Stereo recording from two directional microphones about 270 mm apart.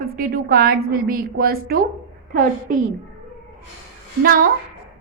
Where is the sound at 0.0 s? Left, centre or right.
Right.